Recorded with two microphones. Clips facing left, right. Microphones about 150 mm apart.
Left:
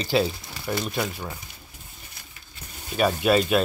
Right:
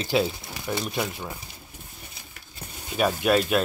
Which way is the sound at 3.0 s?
Centre (ahead or behind).